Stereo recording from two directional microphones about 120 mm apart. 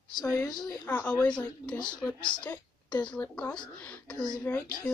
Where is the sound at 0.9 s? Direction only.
15° left (ahead or behind).